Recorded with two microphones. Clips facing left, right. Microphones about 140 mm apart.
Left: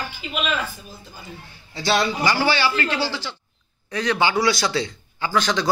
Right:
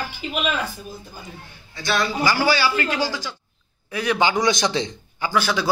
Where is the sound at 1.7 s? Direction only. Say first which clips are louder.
Left 2 dB; 25° left (ahead or behind).